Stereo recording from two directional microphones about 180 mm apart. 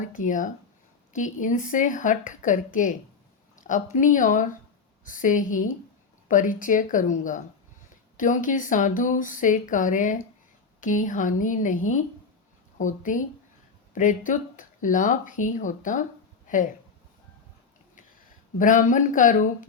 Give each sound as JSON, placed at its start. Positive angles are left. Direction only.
{"t": 0.1, "sound": "speech", "side_deg": 45}
{"t": 18.5, "sound": "speech", "side_deg": 45}